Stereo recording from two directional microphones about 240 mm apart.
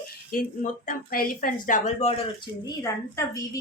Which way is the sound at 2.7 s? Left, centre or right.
Centre.